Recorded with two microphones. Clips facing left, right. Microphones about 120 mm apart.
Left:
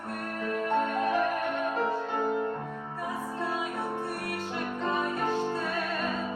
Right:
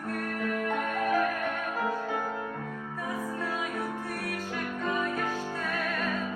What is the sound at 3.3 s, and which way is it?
Music, 30° left (ahead or behind).